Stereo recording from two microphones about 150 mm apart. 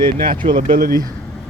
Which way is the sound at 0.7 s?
70° right (ahead or behind).